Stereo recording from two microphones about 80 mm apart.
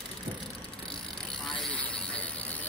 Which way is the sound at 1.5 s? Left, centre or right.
Centre.